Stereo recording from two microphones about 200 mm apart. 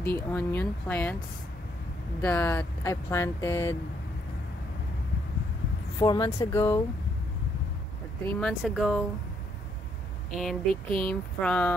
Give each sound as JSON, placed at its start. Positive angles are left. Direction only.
{"t": 0.0, "sound": "speech", "side_deg": 10}
{"t": 2.2, "sound": "speech", "side_deg": 10}
{"t": 5.9, "sound": "speech", "side_deg": 20}
{"t": 8.3, "sound": "speech", "side_deg": 5}
{"t": 10.3, "sound": "speech", "side_deg": 0}